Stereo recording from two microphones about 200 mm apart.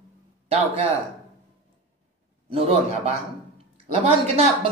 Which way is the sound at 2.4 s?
30° right (ahead or behind).